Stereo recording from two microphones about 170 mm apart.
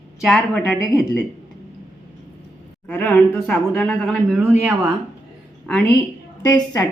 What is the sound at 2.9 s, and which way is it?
A woman's voice, 10° left (ahead or behind).